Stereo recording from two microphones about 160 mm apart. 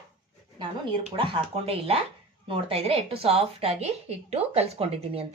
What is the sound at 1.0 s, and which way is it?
Speech, 35° right (ahead or behind).